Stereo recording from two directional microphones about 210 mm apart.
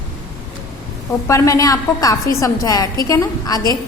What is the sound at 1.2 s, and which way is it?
A woman's voice, 15° left (ahead or behind).